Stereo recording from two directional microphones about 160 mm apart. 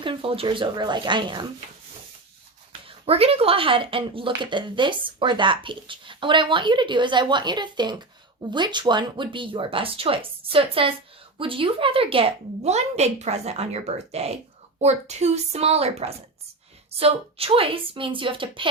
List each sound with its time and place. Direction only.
0.0 s speech: 30° right (ahead or behind)
2.8 s speech: 40° right (ahead or behind)